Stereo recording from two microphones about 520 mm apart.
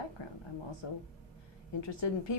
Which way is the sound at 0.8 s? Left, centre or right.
Left.